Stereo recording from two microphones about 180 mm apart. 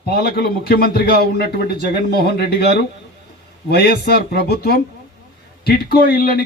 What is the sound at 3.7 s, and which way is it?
A man's voice, 65° left (ahead or behind).